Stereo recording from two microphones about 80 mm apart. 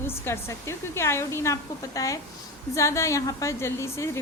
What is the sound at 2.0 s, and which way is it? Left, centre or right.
A woman's voice, left.